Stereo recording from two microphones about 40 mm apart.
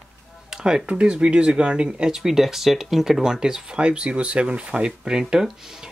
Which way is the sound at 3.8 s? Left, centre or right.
Right.